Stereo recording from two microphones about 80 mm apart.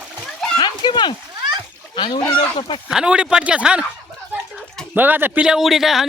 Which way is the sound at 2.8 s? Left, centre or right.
Centre.